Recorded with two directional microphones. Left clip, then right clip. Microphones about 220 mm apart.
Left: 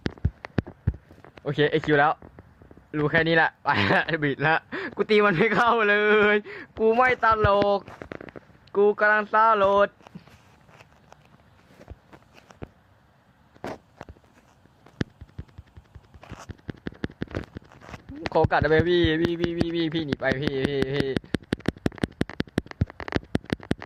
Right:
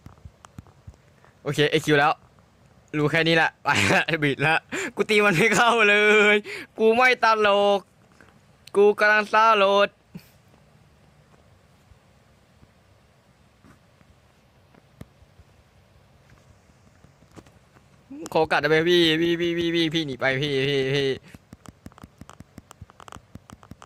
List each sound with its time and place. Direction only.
1.5 s speech: 35° right (ahead or behind)
8.7 s speech: 40° right (ahead or behind)
18.3 s speech: 30° right (ahead or behind)
19.3 s a sound: centre (ahead or behind)
19.8 s speech: 30° right (ahead or behind)
21.7 s a sound: 20° left (ahead or behind)